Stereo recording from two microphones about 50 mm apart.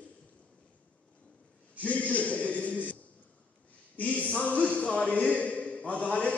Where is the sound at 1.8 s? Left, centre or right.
Left.